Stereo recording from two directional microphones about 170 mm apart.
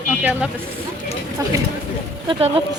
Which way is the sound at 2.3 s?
30° right (ahead or behind).